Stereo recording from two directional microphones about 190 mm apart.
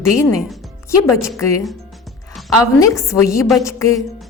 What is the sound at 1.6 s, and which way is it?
Music, centre (ahead or behind).